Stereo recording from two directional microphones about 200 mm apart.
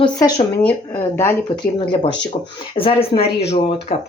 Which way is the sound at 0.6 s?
10° left (ahead or behind).